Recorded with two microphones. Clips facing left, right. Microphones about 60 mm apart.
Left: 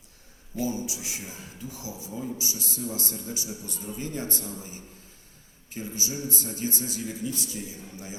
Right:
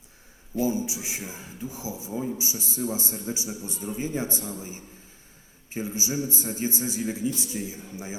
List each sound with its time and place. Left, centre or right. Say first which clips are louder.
0.5 s speech: right 4 dB; right